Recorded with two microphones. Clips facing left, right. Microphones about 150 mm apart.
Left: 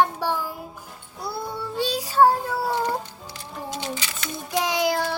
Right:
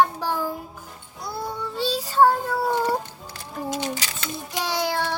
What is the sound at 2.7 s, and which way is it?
Music, 5° right (ahead or behind).